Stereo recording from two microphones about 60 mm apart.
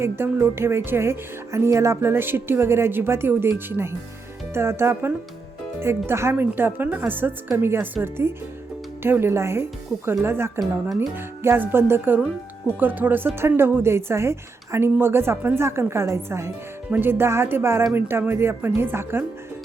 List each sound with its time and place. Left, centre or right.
0.0 s speech: right
10.6 s speech: centre
11.1 s speech: right
16.9 s speech: right